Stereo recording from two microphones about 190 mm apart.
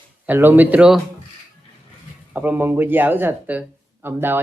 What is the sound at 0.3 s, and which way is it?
Speech, 10° right (ahead or behind).